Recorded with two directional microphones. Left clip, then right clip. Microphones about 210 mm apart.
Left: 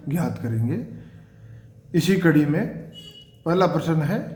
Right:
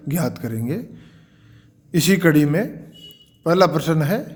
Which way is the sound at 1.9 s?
50° right (ahead or behind).